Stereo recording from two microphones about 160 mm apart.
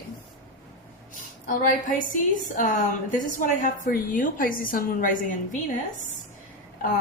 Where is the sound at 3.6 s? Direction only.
55° left (ahead or behind).